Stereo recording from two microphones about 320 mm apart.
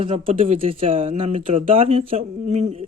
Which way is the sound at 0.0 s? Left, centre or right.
Centre.